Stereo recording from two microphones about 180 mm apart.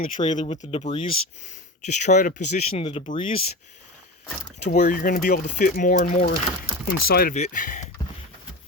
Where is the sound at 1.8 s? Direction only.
40° left (ahead or behind).